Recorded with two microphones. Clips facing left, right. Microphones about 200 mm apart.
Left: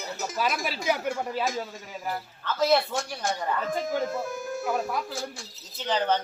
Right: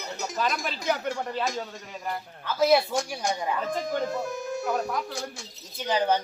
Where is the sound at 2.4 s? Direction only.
10° right (ahead or behind).